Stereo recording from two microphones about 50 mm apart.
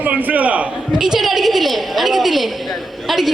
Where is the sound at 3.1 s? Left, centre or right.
Centre.